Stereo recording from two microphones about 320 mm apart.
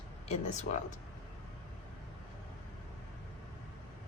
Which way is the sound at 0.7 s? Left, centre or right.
Left.